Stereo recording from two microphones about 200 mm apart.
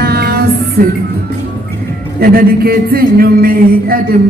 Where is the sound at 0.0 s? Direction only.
50° right (ahead or behind).